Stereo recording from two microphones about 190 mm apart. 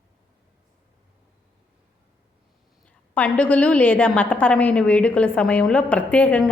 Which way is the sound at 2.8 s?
5° left (ahead or behind).